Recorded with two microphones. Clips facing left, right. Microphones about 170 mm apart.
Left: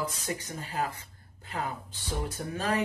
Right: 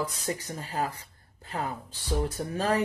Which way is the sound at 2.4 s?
40° right (ahead or behind).